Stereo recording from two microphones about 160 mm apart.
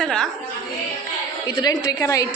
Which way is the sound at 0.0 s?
5° left (ahead or behind).